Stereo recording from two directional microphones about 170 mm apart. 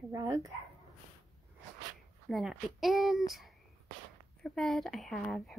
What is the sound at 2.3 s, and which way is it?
A woman's voice, centre (ahead or behind).